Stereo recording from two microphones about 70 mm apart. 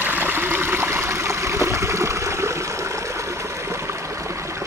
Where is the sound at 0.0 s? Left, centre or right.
Right.